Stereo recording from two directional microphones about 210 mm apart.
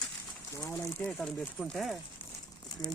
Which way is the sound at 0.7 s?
10° left (ahead or behind).